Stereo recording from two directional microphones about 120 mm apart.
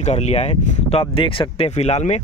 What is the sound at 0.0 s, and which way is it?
Speech, 65° left (ahead or behind).